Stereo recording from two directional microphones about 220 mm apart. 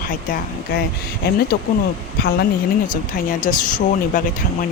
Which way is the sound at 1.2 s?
45° left (ahead or behind).